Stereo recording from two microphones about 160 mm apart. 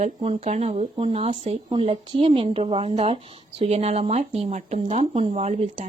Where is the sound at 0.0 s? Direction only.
40° right (ahead or behind).